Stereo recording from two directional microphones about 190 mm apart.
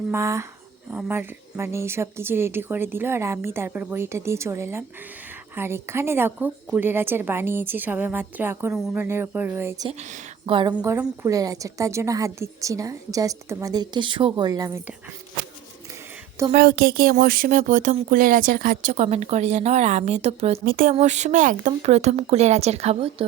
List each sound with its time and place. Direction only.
0.1 s a woman's voice: 15° right (ahead or behind)
10.0 s a woman's voice: 40° right (ahead or behind)
10.8 s a woman's voice: 10° right (ahead or behind)
16.5 s speech: 50° right (ahead or behind); by 20.6 s 35° right (ahead or behind)
20.7 s speech: 50° right (ahead or behind)
20.9 s speech: 35° right (ahead or behind)